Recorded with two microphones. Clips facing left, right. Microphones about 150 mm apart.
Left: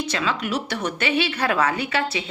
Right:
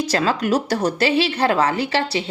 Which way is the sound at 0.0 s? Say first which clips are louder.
Right 5 dB; 40° right (ahead or behind).